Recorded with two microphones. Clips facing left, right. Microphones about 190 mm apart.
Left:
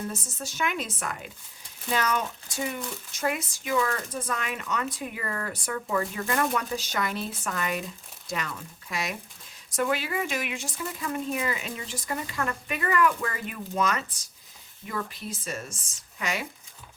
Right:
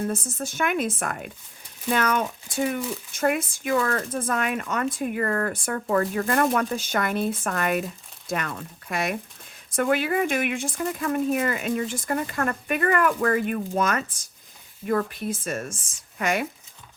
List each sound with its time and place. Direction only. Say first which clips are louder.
0.1 s speech: right 7 dB; 55° right (ahead or behind)